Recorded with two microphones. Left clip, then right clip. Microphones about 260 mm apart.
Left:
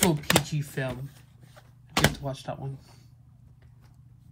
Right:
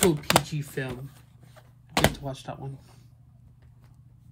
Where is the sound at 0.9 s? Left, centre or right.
Right.